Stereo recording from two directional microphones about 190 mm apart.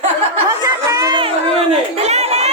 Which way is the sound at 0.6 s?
20° right (ahead or behind).